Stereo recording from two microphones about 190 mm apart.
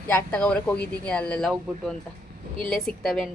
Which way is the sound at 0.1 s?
5° left (ahead or behind).